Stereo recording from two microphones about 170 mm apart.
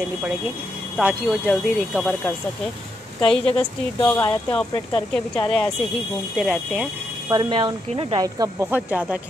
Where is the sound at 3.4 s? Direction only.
35° left (ahead or behind).